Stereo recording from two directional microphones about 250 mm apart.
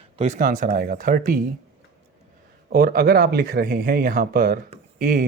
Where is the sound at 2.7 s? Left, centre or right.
Right.